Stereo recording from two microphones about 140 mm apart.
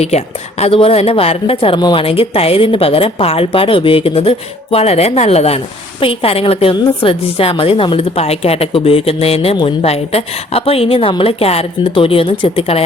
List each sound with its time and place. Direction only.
0.6 s a woman's voice: 45° left (ahead or behind)